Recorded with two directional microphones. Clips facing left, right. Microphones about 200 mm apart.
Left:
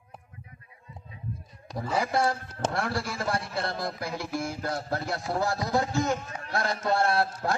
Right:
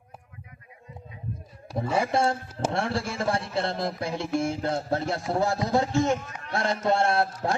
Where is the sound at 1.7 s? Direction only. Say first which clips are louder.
Right 2 dB; 25° right (ahead or behind).